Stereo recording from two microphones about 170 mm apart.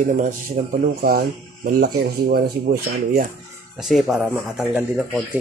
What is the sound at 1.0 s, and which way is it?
Speech, 60° right (ahead or behind).